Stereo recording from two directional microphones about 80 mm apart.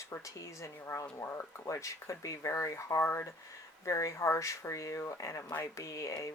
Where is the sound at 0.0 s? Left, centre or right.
Left.